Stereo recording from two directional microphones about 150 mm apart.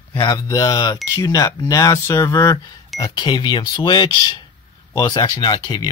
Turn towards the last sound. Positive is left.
turn(degrees=30)  # may be behind; listen again after turning